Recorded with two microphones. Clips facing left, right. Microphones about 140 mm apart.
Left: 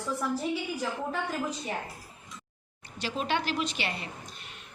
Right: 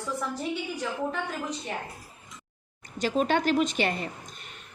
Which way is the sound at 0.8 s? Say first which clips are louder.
Right 1 dB; 5° left (ahead or behind).